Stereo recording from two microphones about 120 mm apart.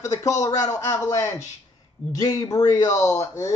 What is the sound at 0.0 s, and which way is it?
A man's voice, 25° left (ahead or behind).